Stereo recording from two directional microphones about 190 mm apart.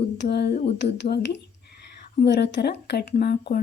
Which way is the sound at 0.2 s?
60° left (ahead or behind).